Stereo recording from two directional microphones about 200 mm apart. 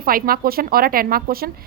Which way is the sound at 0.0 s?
45° right (ahead or behind).